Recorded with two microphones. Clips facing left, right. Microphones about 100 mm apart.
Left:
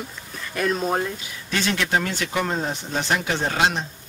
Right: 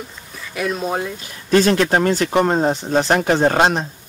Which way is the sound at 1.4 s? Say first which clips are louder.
Right 10 dB; 40° right (ahead or behind).